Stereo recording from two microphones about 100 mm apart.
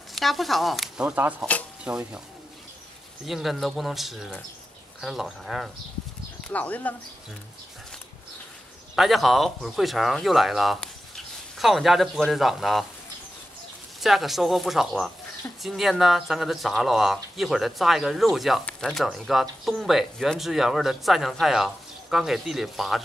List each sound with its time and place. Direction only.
0.1 s speech: centre (ahead or behind)
1.0 s speech: 20° right (ahead or behind)
3.3 s speech: centre (ahead or behind)
6.5 s speech: 15° left (ahead or behind)
8.9 s speech: centre (ahead or behind)
14.0 s speech: centre (ahead or behind)